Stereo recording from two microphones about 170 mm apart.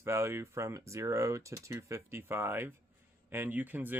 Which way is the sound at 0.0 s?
15° right (ahead or behind).